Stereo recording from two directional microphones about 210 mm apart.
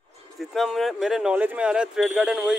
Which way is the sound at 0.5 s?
Centre (ahead or behind).